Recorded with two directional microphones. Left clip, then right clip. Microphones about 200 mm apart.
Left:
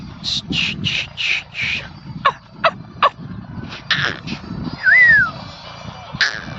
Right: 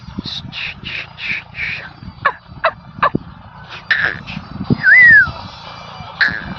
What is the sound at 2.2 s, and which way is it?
Fowl, 20° left (ahead or behind).